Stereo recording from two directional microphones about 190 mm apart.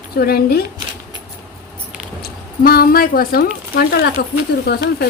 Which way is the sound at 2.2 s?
55° left (ahead or behind).